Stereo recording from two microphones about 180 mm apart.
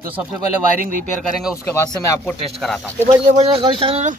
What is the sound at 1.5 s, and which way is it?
Speech, 15° left (ahead or behind).